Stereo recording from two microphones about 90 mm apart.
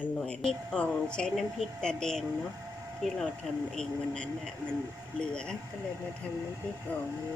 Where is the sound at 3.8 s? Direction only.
10° left (ahead or behind).